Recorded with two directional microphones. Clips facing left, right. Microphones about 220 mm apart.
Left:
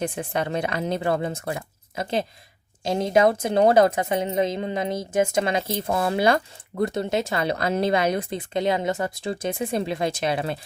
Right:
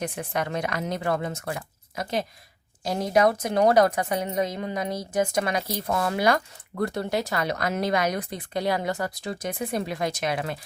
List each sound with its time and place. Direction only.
0.0 s speech: 30° left (ahead or behind)